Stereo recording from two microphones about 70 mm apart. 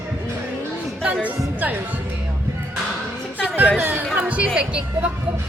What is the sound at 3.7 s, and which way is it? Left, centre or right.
Speech, right.